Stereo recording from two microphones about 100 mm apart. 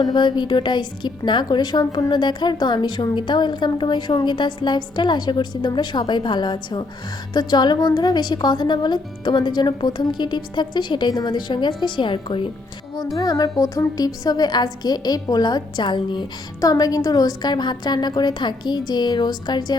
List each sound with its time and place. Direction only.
0.0 s a woman's voice: 50° left (ahead or behind)
13.1 s a woman's voice: 35° left (ahead or behind)
16.6 s a woman's voice: 40° left (ahead or behind)